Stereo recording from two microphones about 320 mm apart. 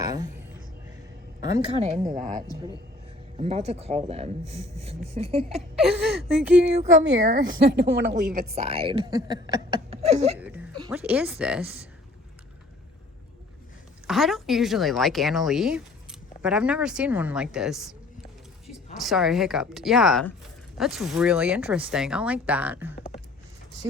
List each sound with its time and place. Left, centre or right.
0.0 s music: centre
1.4 s a woman's voice: centre
5.7 s speech: centre
6.7 s a woman's voice: right
10.4 s speech: centre
14.1 s speech: centre
18.9 s speech: centre